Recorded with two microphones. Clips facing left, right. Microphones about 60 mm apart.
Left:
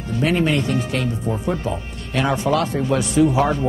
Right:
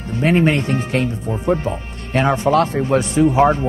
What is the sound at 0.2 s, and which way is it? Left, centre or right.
A man's voice, right.